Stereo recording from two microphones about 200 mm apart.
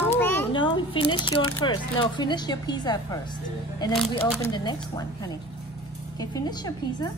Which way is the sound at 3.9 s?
5° left (ahead or behind).